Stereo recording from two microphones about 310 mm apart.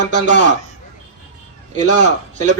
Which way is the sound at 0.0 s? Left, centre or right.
Right.